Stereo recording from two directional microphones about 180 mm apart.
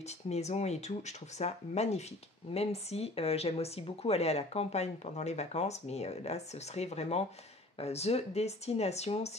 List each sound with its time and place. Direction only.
0.3 s speech: 35° left (ahead or behind)